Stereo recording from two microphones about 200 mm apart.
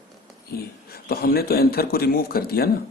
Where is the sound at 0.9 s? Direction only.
50° left (ahead or behind).